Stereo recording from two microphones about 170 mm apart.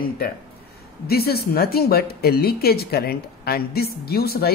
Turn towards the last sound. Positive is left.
turn(degrees=65)  # may be behind; listen again after turning